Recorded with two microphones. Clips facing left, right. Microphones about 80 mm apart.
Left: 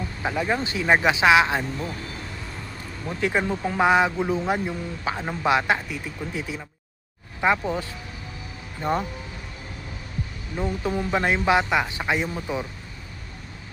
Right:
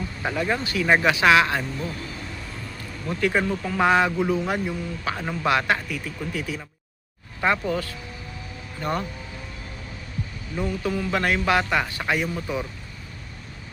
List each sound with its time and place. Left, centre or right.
0.3 s speech: centre
3.1 s speech: centre
10.5 s speech: centre